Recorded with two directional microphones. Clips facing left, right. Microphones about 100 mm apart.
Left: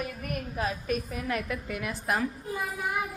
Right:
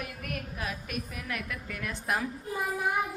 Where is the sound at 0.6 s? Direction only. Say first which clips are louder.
Left 10 dB; 35° left (ahead or behind).